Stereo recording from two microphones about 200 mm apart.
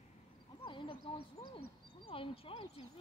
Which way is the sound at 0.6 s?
25° left (ahead or behind).